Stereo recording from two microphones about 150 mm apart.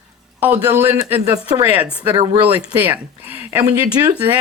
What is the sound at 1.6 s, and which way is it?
Speech, 10° right (ahead or behind).